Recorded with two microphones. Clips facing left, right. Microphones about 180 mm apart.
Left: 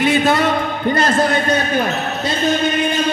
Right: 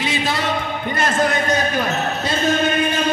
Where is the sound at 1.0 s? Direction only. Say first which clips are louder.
Left 2 dB; 35° left (ahead or behind).